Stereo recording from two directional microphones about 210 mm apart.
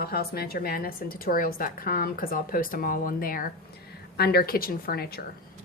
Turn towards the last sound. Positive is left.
turn(degrees=45)  # may be behind; listen again after turning